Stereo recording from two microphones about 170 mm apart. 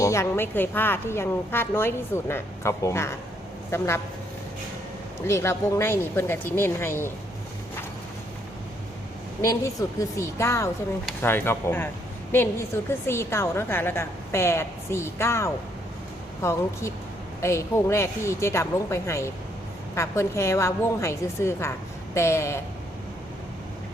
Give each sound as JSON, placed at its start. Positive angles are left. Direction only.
{"t": 0.0, "sound": "a woman's voice", "side_deg": 15}
{"t": 5.2, "sound": "a woman's voice", "side_deg": 15}
{"t": 9.4, "sound": "a woman's voice", "side_deg": 20}